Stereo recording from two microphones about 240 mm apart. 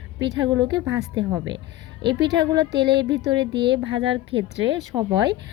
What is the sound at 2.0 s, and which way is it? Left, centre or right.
Speech, centre.